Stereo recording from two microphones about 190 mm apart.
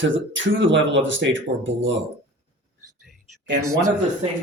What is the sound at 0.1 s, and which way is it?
Speech, 75° right (ahead or behind).